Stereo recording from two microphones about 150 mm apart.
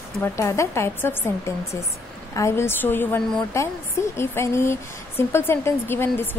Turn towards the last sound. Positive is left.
turn(degrees=15)  # may be behind; listen again after turning